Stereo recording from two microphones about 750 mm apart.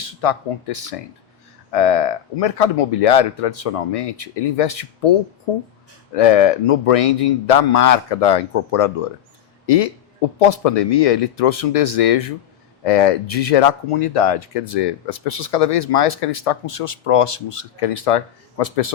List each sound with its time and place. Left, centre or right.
0.0 s speech: left
6.1 s speech: left